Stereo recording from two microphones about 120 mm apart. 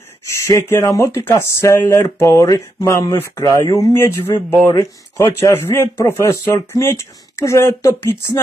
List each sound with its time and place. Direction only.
0.3 s speech: 25° left (ahead or behind)